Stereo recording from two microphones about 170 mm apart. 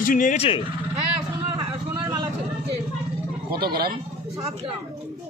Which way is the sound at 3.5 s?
65° right (ahead or behind).